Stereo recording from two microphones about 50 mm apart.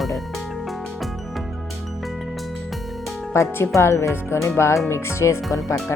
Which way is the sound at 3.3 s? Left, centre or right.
Left.